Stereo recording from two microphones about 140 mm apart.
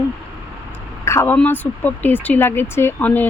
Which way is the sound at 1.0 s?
20° left (ahead or behind).